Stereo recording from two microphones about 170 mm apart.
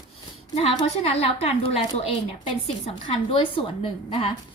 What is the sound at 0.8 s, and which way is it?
A woman's voice, 35° left (ahead or behind).